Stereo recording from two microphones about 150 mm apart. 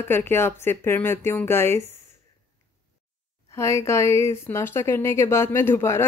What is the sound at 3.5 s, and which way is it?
Speech, 20° left (ahead or behind).